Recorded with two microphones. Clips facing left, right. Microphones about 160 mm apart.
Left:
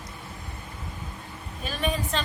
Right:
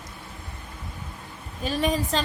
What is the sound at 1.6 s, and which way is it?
Speech, 35° right (ahead or behind).